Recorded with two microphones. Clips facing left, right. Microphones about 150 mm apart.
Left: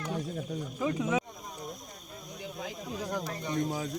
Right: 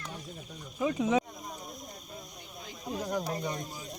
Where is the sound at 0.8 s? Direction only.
20° right (ahead or behind).